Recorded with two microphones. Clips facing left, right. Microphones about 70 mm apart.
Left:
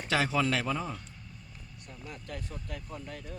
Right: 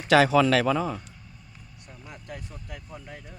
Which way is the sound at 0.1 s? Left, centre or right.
Right.